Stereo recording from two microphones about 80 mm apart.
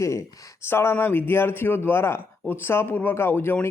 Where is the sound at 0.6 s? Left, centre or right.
Left.